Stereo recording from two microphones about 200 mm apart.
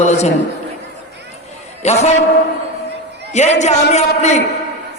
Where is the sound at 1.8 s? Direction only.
35° left (ahead or behind).